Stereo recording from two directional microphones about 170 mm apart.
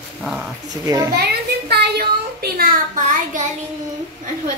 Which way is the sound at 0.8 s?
20° right (ahead or behind).